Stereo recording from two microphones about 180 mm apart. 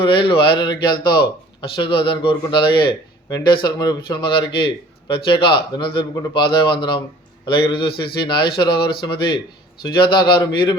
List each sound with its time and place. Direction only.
0.0 s a man's voice: 30° left (ahead or behind)